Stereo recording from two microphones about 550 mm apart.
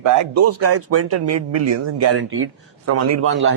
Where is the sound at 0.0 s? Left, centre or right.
Right.